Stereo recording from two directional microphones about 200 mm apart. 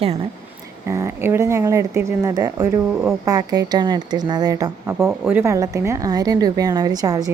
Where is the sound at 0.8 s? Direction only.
15° right (ahead or behind).